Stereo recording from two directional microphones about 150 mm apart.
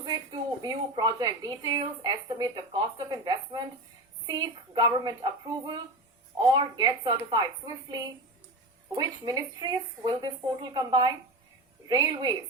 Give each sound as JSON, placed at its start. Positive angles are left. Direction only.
{"t": 0.0, "sound": "a woman's voice", "side_deg": -25}
{"t": 9.0, "sound": "speech", "side_deg": -25}